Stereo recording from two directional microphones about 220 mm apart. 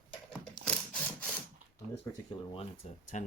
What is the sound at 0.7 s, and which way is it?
Wood, 5° left (ahead or behind).